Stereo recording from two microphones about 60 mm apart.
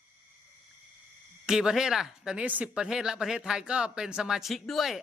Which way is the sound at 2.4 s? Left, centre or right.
Right.